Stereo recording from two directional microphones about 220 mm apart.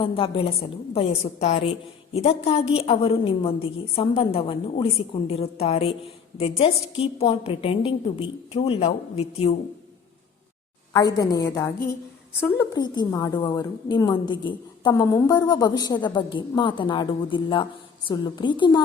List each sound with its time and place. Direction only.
0.0 s a woman's voice: 25° left (ahead or behind)
10.9 s a woman's voice: 15° left (ahead or behind)